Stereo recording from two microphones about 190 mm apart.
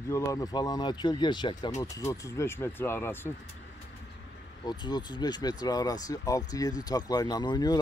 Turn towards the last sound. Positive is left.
turn(degrees=20)  # may be behind; listen again after turning